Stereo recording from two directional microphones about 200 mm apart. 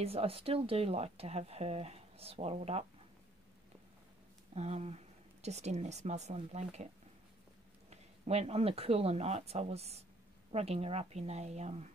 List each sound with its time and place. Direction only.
0.0 s speech: 30° right (ahead or behind)
4.6 s speech: 35° right (ahead or behind)
7.9 s speech: 30° right (ahead or behind)